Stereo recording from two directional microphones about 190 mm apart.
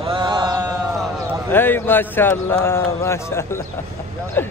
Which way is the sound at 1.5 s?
10° left (ahead or behind).